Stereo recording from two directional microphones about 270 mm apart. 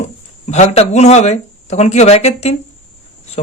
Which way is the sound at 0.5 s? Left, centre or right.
Left.